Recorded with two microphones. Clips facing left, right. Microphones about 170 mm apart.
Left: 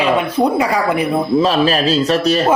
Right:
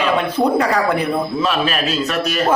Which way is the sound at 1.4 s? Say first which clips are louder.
Left 5 dB; 35° left (ahead or behind).